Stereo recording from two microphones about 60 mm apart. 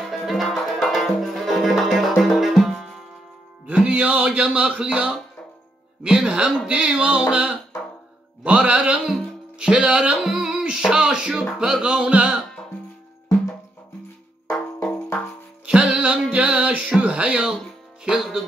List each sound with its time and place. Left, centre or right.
0.2 s music: centre
3.6 s music: right
6.7 s a sound: centre
8.5 s music: centre
15.6 s music: centre